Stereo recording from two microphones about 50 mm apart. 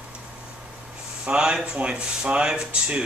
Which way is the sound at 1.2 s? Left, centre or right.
Centre.